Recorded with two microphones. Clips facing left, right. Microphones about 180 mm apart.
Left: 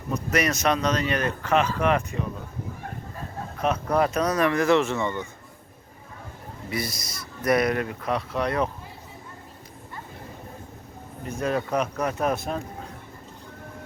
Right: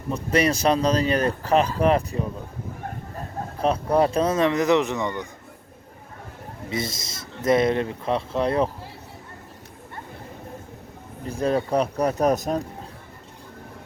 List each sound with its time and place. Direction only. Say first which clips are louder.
0.1 s speech: right 3 dB; 30° right (ahead or behind)
3.6 s speech: right 3 dB; 30° right (ahead or behind)
6.7 s speech: right 2 dB; 25° right (ahead or behind)
11.3 s speech: right 3 dB; 30° right (ahead or behind)